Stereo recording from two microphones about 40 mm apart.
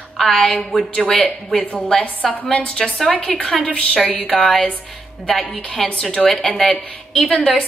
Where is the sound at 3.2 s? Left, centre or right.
Left.